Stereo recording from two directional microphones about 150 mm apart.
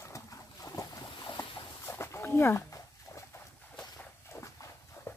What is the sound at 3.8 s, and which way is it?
Walk, 20° left (ahead or behind).